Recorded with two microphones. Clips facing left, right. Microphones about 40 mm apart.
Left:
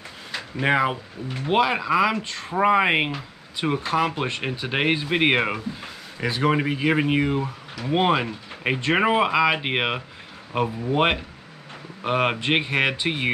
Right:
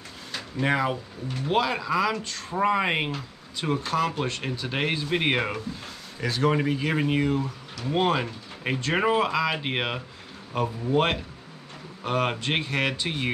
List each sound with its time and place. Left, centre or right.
0.3 s speech: left